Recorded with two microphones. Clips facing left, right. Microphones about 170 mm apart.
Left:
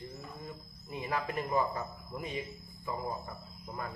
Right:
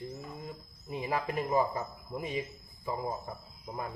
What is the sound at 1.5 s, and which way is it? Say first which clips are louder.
Speech: right 3 dB; 20° right (ahead or behind).